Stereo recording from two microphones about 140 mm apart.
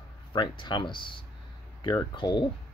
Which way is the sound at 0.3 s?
35° left (ahead or behind).